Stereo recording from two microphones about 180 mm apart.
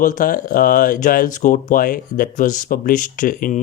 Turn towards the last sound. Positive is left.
turn(degrees=45)  # may be behind; listen again after turning